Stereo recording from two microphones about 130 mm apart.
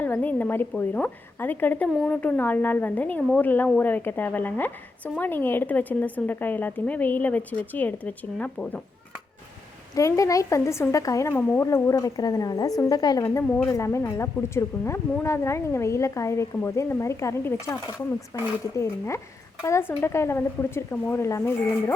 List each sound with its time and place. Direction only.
0.0 s a woman's voice: 15° left (ahead or behind)
9.9 s a woman's voice: 25° left (ahead or behind)